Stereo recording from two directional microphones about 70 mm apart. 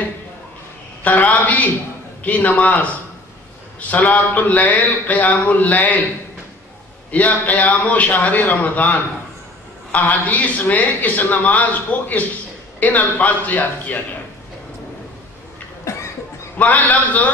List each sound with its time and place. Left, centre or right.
1.0 s speech: left
7.1 s speech: left
15.8 s a sound: left
16.5 s speech: left